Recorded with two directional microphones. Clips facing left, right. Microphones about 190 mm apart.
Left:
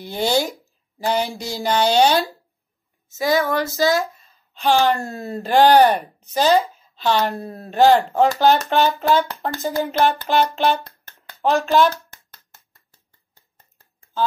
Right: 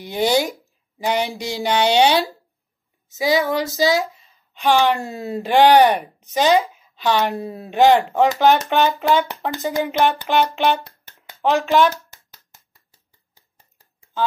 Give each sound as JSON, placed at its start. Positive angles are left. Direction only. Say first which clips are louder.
{"t": 0.0, "sound": "speech", "louder": "right 2 dB", "side_deg": -15}
{"t": 3.3, "sound": "speech", "louder": "even", "side_deg": -15}
{"t": 12.3, "sound": "a sound", "louder": "even", "side_deg": -15}